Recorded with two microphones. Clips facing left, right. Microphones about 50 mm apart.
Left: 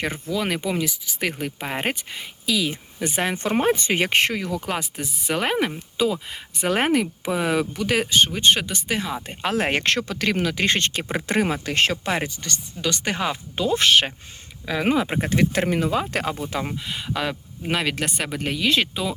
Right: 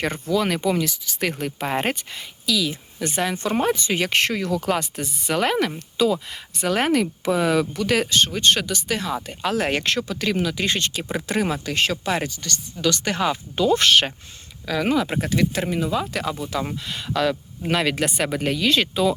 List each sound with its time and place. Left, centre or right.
0.0 s speech: centre
3.2 s speech: left; by 5.3 s centre
5.3 s speech: centre
9.2 s speech: left
9.8 s speech: left; by 14.1 s centre
14.7 s speech: left
15.2 s speech: left
16.6 s speech: centre